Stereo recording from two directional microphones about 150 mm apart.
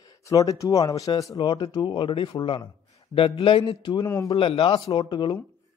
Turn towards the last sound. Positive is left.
turn(degrees=30)  # may be behind; listen again after turning